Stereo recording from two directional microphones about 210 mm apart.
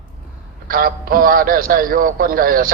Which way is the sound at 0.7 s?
45° right (ahead or behind).